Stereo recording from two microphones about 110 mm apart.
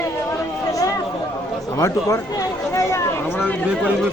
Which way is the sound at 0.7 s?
30° left (ahead or behind).